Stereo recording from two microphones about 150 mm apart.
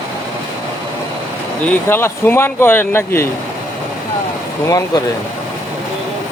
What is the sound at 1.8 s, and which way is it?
Speech, 15° left (ahead or behind).